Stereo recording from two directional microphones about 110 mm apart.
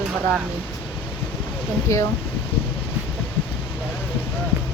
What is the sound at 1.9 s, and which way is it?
Speech, 30° left (ahead or behind).